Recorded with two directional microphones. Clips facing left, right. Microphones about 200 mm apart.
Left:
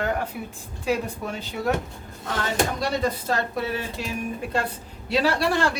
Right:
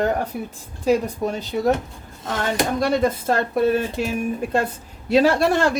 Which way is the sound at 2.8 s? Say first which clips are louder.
Right 5 dB; 50° right (ahead or behind).